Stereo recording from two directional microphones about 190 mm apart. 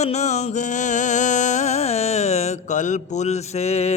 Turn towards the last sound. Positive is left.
turn(degrees=35)  # may be behind; listen again after turning